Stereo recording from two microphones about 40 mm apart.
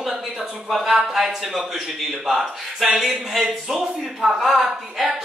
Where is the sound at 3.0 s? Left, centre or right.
Centre.